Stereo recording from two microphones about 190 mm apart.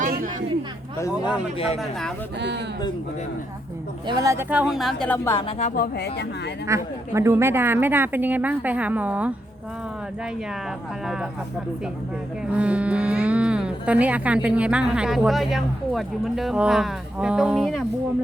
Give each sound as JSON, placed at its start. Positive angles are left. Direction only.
{"t": 0.0, "sound": "a sound", "side_deg": -45}
{"t": 0.9, "sound": "speech", "side_deg": 20}
{"t": 1.8, "sound": "speech", "side_deg": 0}
{"t": 4.0, "sound": "speech", "side_deg": -20}
{"t": 5.5, "sound": "speech", "side_deg": 35}
{"t": 5.7, "sound": "speech", "side_deg": 55}
{"t": 6.7, "sound": "a woman's voice", "side_deg": -15}
{"t": 12.5, "sound": "speech", "side_deg": -5}